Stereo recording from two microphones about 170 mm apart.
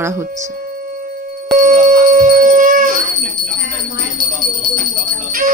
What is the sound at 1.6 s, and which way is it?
Howl, 50° right (ahead or behind).